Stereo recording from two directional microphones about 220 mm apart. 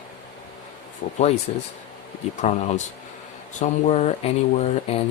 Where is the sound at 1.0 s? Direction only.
45° left (ahead or behind).